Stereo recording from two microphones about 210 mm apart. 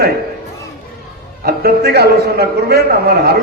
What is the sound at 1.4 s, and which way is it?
A man's voice, 50° right (ahead or behind).